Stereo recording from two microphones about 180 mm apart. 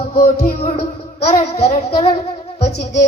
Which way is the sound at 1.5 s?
35° left (ahead or behind).